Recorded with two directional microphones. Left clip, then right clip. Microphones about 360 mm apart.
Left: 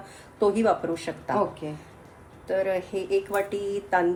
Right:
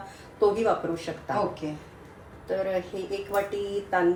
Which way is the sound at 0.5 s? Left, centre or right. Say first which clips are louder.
Left 1 dB; left.